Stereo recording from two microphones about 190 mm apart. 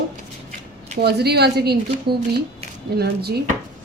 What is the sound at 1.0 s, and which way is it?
A woman's voice, 60° right (ahead or behind).